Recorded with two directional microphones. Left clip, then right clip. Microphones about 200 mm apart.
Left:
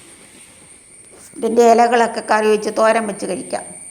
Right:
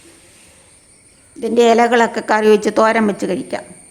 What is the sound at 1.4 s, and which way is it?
Speech, 10° right (ahead or behind).